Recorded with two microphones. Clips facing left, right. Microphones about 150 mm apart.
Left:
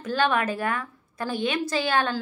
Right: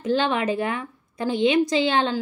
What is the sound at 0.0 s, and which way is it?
A woman's voice, 20° right (ahead or behind).